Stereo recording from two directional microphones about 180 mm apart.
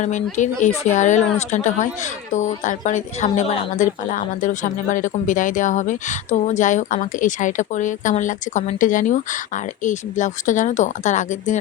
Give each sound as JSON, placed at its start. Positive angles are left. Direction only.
{"t": 0.0, "sound": "a woman's voice", "side_deg": 45}
{"t": 3.8, "sound": "speech", "side_deg": 45}